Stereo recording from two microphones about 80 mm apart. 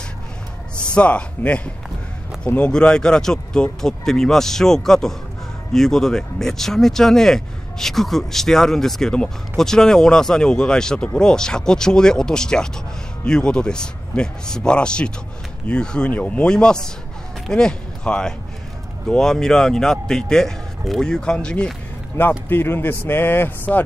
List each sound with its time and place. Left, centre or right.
0.9 s a man's voice: centre
22.5 s a man's voice: left